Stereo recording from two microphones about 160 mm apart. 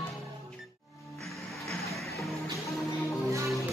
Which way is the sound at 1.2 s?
Centre (ahead or behind).